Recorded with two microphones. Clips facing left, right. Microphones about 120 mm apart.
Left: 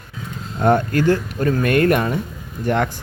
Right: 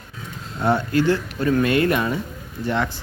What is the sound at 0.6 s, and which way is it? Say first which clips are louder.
Speech: left 3 dB; 50° left (ahead or behind).